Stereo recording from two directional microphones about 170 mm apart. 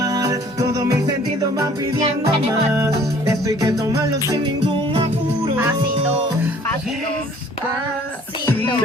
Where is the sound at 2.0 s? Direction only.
40° right (ahead or behind).